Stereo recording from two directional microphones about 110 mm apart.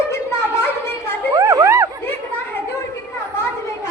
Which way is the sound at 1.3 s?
30° right (ahead or behind).